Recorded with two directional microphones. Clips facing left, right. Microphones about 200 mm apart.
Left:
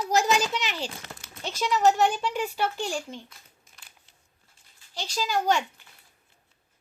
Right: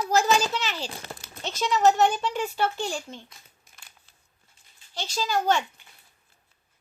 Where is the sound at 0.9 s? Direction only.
35° right (ahead or behind).